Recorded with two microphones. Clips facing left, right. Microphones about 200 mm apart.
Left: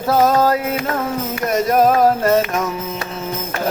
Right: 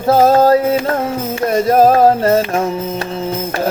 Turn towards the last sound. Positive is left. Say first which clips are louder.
# right 3 dB
turn(degrees=-30)  # may be behind; listen again after turning